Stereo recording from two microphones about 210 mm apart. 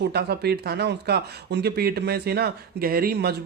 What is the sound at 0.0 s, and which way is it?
Speech, 50° right (ahead or behind).